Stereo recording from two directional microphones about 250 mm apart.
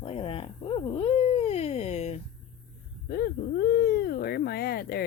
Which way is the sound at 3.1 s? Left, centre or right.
Left.